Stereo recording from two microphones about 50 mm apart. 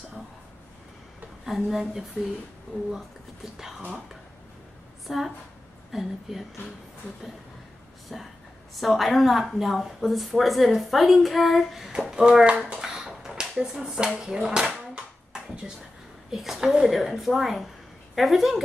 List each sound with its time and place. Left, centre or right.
1.4 s a woman's voice: centre
3.5 s speech: centre
5.0 s a woman's voice: centre
8.1 s a woman's voice: centre
12.1 s speech: centre
12.8 s a sound: centre
14.2 s speech: centre
15.3 s a sound: centre
16.3 s a woman's voice: centre